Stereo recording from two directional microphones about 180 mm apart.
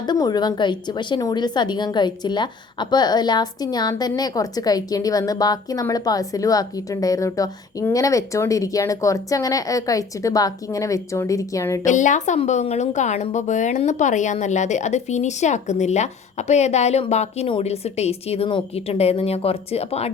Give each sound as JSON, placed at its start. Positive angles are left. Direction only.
{"t": 0.0, "sound": "a woman's voice", "side_deg": 25}
{"t": 11.9, "sound": "a woman's voice", "side_deg": 45}